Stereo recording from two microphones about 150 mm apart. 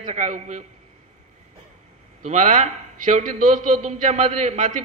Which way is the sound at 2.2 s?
55° right (ahead or behind).